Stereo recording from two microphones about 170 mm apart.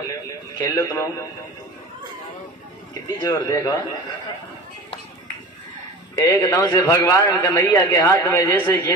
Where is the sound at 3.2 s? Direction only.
20° left (ahead or behind).